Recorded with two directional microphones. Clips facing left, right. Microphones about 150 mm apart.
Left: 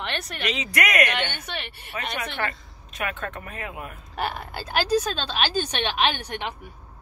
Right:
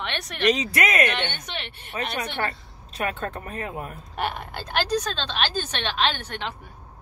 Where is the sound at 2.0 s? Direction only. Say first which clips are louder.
Right 2 dB; 30° right (ahead or behind).